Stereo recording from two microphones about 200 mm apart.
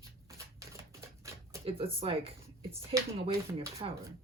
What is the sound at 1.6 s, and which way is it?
Speech, 30° right (ahead or behind).